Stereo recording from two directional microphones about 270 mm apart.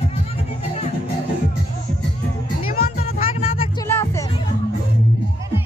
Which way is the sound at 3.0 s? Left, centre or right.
Left.